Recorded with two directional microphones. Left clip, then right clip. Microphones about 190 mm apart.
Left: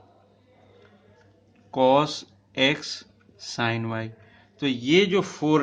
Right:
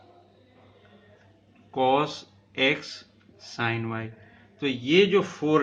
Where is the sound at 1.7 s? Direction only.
55° left (ahead or behind).